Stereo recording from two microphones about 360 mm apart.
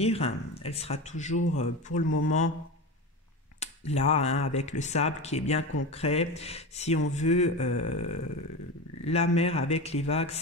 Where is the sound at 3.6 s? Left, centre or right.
Centre.